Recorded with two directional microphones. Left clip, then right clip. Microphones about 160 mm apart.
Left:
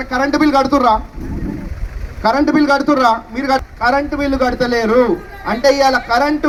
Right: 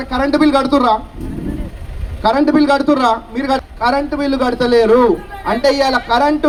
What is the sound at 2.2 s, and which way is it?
A man's voice, 15° left (ahead or behind).